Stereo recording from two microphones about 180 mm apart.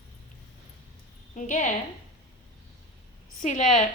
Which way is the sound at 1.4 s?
45° left (ahead or behind).